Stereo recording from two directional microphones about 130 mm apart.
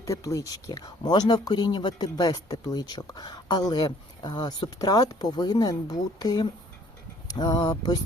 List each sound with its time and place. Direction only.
0.0 s speech: 25° left (ahead or behind)